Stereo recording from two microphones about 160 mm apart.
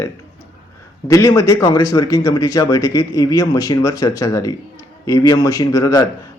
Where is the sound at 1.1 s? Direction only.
20° left (ahead or behind).